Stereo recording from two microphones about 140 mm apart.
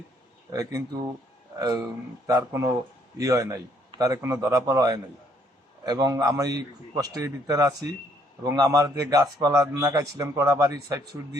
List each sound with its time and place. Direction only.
0.5 s a man's voice: 25° right (ahead or behind)
2.2 s a man's voice: 20° right (ahead or behind)